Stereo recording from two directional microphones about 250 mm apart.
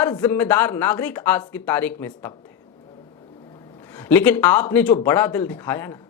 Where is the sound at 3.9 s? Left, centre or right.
Centre.